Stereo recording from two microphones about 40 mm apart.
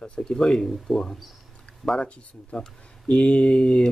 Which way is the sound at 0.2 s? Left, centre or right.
Centre.